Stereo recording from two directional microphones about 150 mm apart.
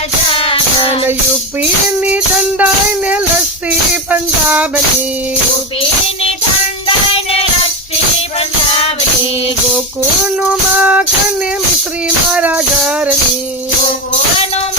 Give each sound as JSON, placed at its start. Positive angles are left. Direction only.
{"t": 0.3, "sound": "music", "side_deg": 40}
{"t": 2.0, "sound": "music", "side_deg": -10}
{"t": 6.8, "sound": "music", "side_deg": 40}
{"t": 10.8, "sound": "music", "side_deg": -10}
{"t": 12.3, "sound": "music", "side_deg": -10}